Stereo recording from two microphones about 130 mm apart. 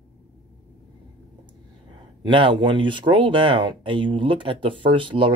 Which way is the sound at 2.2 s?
40° right (ahead or behind).